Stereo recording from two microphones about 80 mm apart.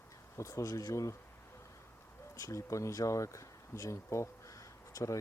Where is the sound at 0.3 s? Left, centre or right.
Left.